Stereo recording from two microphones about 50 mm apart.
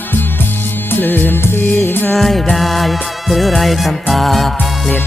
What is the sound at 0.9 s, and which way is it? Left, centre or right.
Music of bollywood, left.